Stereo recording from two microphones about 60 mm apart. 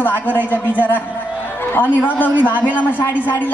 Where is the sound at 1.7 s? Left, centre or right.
Left.